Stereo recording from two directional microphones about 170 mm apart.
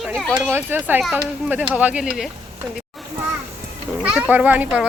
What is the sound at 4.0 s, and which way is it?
Speech, 5° right (ahead or behind).